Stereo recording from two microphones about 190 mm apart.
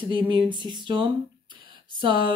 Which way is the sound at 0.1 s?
25° right (ahead or behind).